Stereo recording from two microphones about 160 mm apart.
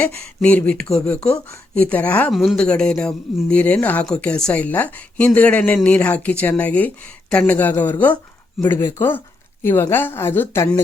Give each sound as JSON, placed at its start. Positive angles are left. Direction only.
{"t": 0.0, "sound": "speech", "side_deg": 10}